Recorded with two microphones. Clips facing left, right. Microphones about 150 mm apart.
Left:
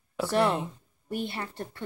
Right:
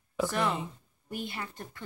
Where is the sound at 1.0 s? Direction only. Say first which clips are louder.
Left 5 dB; 30° left (ahead or behind).